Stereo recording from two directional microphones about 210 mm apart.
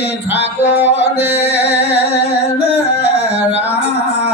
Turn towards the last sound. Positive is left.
turn(degrees=55)  # may be behind; listen again after turning